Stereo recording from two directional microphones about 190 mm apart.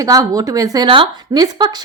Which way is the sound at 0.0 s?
20° right (ahead or behind).